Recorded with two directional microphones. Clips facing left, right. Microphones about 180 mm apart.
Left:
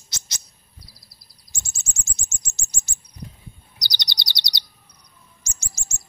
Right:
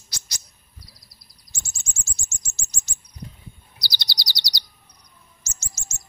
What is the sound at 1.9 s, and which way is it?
Bird flight, 20° left (ahead or behind).